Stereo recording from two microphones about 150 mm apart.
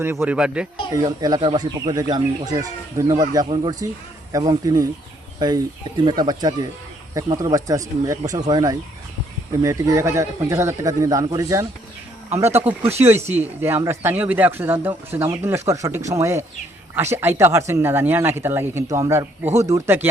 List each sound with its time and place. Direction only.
0.0 s speech: 15° right (ahead or behind)
0.9 s speech: 25° right (ahead or behind)